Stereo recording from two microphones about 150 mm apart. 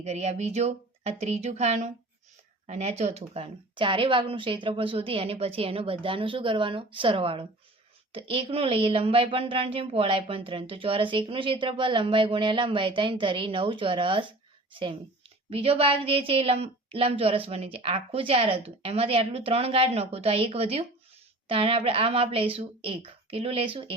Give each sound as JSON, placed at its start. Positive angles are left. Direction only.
{"t": 0.0, "sound": "a woman's voice", "side_deg": -45}
{"t": 15.4, "sound": "a woman's voice", "side_deg": -40}